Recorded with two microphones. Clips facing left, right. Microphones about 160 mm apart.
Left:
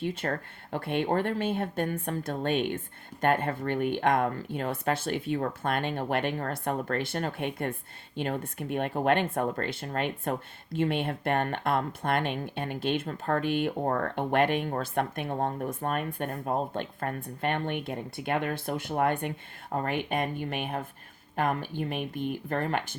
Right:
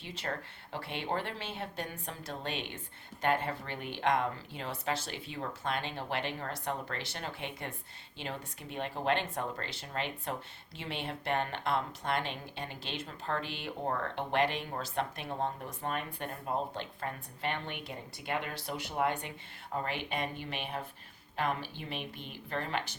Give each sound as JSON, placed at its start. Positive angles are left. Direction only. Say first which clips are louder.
{"t": 0.0, "sound": "speech", "louder": "left 8 dB", "side_deg": 50}